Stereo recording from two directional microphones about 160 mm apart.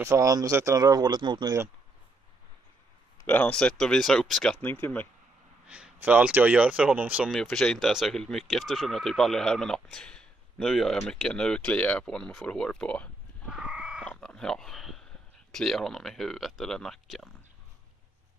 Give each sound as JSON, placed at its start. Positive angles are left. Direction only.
{"t": 0.0, "sound": "speech", "side_deg": -20}
{"t": 3.3, "sound": "speech", "side_deg": 10}
{"t": 5.7, "sound": "speech", "side_deg": -10}
{"t": 7.2, "sound": "speech", "side_deg": 0}
{"t": 13.5, "sound": "frog", "side_deg": -5}
{"t": 14.2, "sound": "a sound", "side_deg": 5}
{"t": 15.5, "sound": "speech", "side_deg": 0}